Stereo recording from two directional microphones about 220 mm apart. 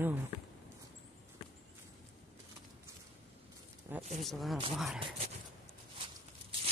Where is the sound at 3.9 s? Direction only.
10° right (ahead or behind).